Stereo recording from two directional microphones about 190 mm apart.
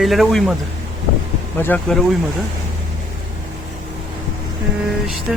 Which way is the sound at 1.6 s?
10° left (ahead or behind).